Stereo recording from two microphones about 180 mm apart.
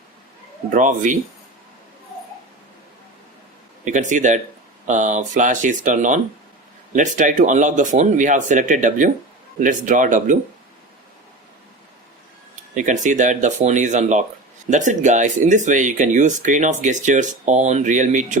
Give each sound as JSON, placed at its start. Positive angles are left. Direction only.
{"t": 0.7, "sound": "speech", "side_deg": -45}
{"t": 3.8, "sound": "speech", "side_deg": -45}
{"t": 12.7, "sound": "speech", "side_deg": -45}